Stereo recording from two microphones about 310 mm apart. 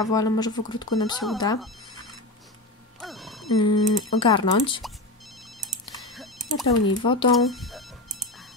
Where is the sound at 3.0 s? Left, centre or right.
Centre.